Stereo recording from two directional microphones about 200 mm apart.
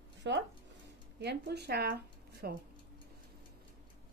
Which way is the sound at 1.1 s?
55° right (ahead or behind).